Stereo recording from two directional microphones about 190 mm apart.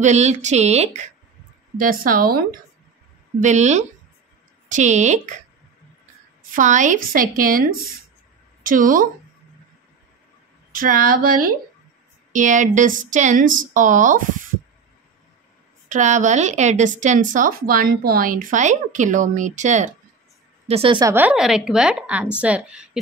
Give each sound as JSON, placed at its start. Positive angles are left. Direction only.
{"t": 0.0, "sound": "speech", "side_deg": -35}
{"t": 1.8, "sound": "speech", "side_deg": -45}
{"t": 3.3, "sound": "speech", "side_deg": -40}
{"t": 6.5, "sound": "speech", "side_deg": -40}
{"t": 10.7, "sound": "speech", "side_deg": -45}
{"t": 15.9, "sound": "speech", "side_deg": -40}
{"t": 21.0, "sound": "a woman's voice", "side_deg": -10}